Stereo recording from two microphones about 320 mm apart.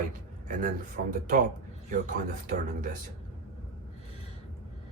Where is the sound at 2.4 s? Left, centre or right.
Right.